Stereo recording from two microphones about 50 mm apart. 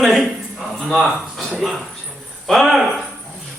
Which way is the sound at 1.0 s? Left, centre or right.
Centre.